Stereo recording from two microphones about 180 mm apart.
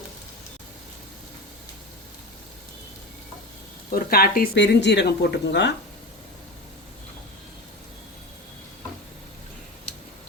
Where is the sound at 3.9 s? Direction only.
55° left (ahead or behind); by 5.7 s 75° left (ahead or behind).